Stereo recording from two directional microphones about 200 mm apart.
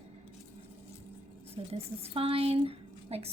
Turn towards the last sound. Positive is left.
turn(degrees=-30)  # may be behind; listen again after turning